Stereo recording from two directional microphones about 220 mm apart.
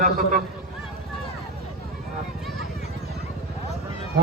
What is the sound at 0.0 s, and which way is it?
Speech, 40° right (ahead or behind).